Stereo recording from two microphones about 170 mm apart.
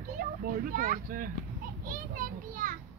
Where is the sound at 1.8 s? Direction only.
55° right (ahead or behind).